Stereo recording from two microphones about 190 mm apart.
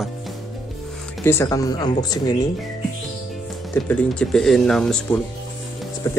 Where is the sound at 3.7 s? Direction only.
5° left (ahead or behind).